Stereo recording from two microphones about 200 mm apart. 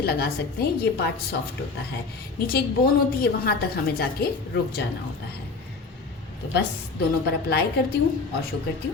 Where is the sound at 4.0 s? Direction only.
50° left (ahead or behind).